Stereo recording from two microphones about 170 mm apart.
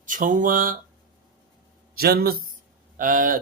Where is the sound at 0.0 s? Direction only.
50° right (ahead or behind).